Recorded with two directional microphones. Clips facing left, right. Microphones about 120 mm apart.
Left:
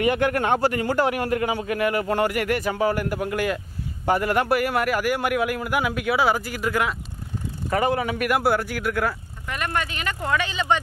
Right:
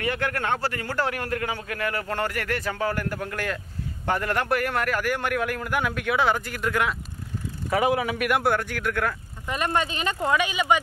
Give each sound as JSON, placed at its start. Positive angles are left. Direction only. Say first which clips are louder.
{"t": 0.0, "sound": "a man's voice", "louder": "left 6 dB", "side_deg": 15}
{"t": 9.5, "sound": "speech", "louder": "right 2 dB", "side_deg": -20}